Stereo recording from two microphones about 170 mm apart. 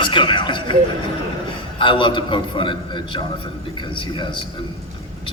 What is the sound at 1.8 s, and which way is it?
Speech, 30° left (ahead or behind).